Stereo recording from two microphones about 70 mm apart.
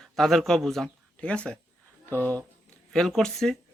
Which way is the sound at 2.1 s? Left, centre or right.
Left.